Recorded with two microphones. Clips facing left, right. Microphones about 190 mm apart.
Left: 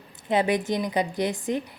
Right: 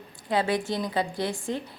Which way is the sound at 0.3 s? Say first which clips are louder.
Left 3 dB; 20° left (ahead or behind).